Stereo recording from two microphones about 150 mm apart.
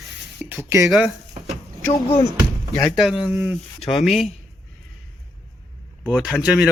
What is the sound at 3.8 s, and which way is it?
Speech, centre (ahead or behind).